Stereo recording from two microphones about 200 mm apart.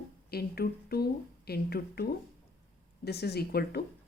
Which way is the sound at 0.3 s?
50° left (ahead or behind).